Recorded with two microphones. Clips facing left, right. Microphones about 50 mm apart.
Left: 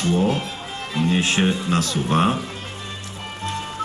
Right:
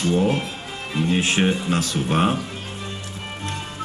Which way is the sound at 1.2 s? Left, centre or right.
Centre.